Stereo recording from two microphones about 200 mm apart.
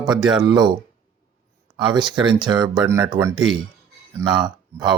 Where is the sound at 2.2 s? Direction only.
25° right (ahead or behind).